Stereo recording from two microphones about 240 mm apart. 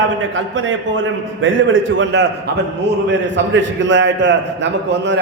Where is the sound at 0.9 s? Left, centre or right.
Right.